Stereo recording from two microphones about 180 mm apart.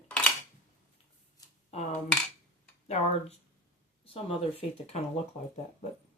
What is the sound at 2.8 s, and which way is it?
Speech, 40° left (ahead or behind).